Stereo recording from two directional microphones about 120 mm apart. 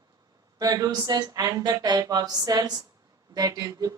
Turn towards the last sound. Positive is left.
turn(degrees=-30)  # may be behind; listen again after turning